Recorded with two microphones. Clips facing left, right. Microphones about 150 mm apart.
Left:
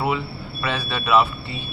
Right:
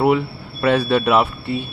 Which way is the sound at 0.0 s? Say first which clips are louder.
Right 7 dB; 60° right (ahead or behind).